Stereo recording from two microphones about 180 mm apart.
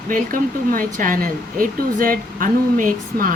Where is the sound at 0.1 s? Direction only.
50° right (ahead or behind).